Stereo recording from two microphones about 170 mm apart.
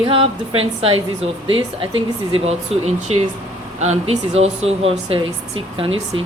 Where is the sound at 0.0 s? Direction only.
35° right (ahead or behind).